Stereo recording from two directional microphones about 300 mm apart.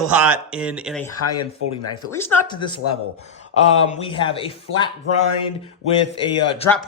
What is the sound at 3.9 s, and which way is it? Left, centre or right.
Speech, centre.